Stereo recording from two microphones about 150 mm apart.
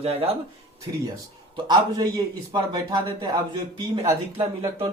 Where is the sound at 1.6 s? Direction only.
25° right (ahead or behind).